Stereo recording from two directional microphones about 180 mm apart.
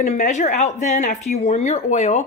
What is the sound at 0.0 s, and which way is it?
Speech, 40° left (ahead or behind).